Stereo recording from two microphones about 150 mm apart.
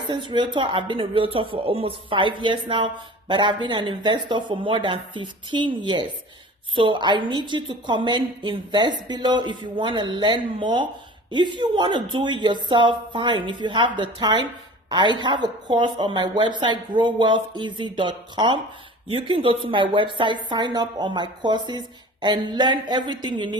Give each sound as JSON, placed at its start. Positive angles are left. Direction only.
{"t": 0.3, "sound": "a woman's voice", "side_deg": -30}